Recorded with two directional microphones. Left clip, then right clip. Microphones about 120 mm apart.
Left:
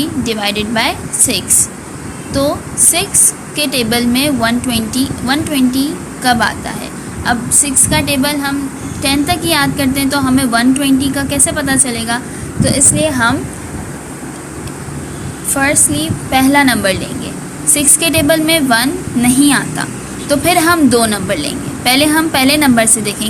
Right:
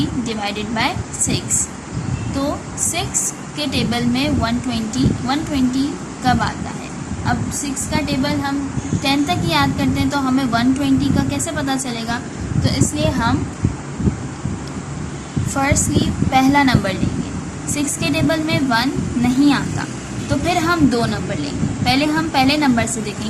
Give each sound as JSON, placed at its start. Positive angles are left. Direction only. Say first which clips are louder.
{"t": 0.0, "sound": "a woman's voice", "louder": "left 6 dB", "side_deg": 30}
{"t": 7.3, "sound": "a woman's voice", "louder": "left 8 dB", "side_deg": 35}
{"t": 12.6, "sound": "a woman's voice", "louder": "left 7 dB", "side_deg": 25}
{"t": 15.5, "sound": "a woman's voice", "louder": "left 5 dB", "side_deg": 10}